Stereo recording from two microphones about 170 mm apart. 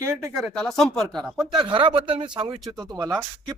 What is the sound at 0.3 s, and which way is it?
Speech, centre (ahead or behind).